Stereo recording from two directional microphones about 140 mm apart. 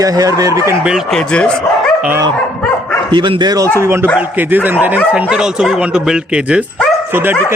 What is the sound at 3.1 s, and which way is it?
Speech, 35° right (ahead or behind).